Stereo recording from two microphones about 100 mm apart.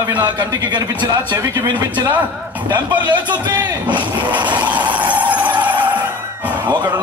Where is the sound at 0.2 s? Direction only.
45° right (ahead or behind).